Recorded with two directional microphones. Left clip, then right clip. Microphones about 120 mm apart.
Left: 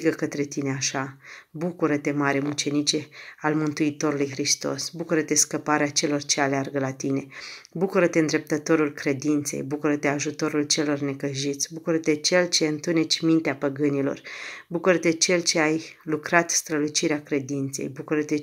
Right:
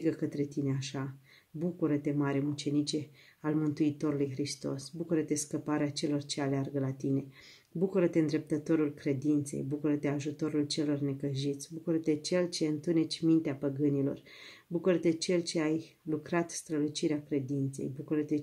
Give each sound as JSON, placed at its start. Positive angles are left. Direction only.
{"t": 0.0, "sound": "speech", "side_deg": -30}